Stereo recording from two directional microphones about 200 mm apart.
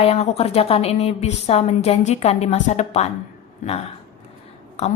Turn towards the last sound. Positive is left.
turn(degrees=30)  # may be behind; listen again after turning